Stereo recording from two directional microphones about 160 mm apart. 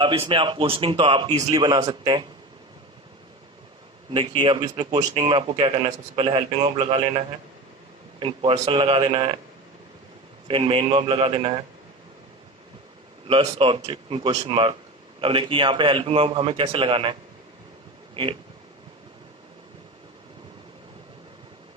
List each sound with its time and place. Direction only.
0.0 s a man's voice: 30° right (ahead or behind)
4.1 s a man's voice: 35° right (ahead or behind)
8.2 s a man's voice: 35° right (ahead or behind)
10.5 s a man's voice: 35° right (ahead or behind)
13.2 s a man's voice: 35° right (ahead or behind)